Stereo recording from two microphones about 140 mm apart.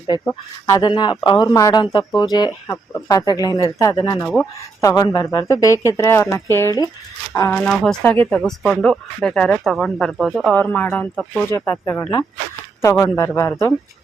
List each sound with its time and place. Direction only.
0.1 s a woman's voice: 30° left (ahead or behind)
7.5 s speech: 5° left (ahead or behind)
12.8 s a woman's voice: 20° left (ahead or behind)